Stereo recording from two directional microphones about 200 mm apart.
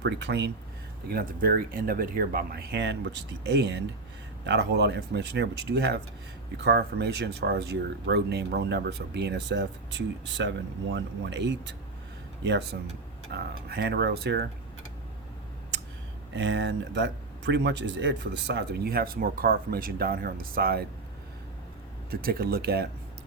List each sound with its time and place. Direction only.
0.0 s speech: 60° right (ahead or behind)
1.1 s speech: 45° right (ahead or behind)
16.3 s speech: 60° right (ahead or behind)
22.1 s speech: 50° right (ahead or behind)